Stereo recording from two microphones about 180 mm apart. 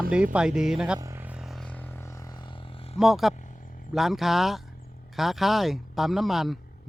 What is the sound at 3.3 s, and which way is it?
Wild animals, 45° left (ahead or behind).